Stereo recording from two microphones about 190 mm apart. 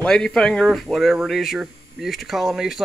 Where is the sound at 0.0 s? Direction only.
5° left (ahead or behind).